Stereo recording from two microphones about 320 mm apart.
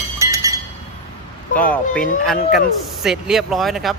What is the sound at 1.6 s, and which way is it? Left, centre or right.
Speech, centre.